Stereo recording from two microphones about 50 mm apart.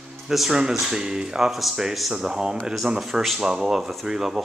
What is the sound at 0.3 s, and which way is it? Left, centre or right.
Speech, centre.